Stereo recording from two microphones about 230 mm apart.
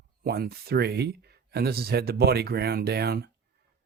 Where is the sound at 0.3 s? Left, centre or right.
Right.